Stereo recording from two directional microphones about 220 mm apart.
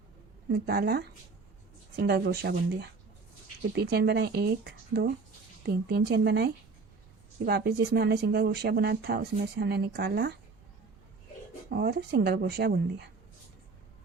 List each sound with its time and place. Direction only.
0.5 s speech: 45° right (ahead or behind)
11.7 s speech: 50° right (ahead or behind)